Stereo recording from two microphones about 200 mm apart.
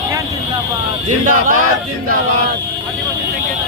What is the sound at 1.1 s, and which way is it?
Chant, 40° right (ahead or behind).